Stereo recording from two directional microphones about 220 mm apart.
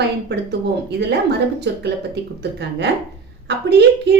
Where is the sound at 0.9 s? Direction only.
50° right (ahead or behind).